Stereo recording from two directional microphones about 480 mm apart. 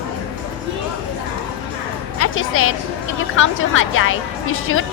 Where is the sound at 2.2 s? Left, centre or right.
Left.